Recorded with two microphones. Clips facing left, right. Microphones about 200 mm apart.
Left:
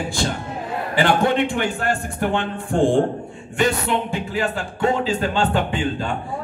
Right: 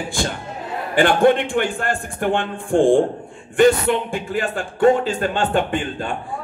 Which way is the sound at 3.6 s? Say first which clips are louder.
Right 6 dB; 50° right (ahead or behind).